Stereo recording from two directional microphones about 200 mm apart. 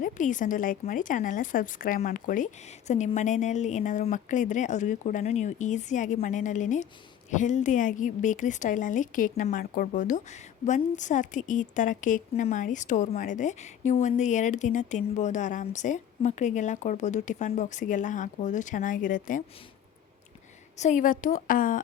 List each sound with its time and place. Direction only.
0.0 s a woman's voice: 40° left (ahead or behind)
20.7 s a woman's voice: 35° left (ahead or behind)